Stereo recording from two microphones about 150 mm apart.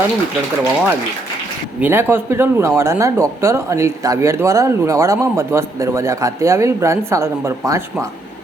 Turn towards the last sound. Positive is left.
turn(degrees=-20)  # may be behind; listen again after turning